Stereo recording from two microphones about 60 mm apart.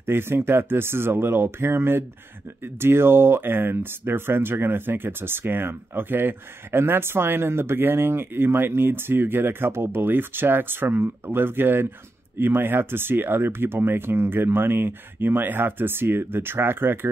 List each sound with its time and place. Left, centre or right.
0.0 s speech: right